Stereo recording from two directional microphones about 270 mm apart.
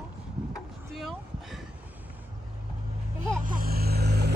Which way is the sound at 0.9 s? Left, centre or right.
Centre.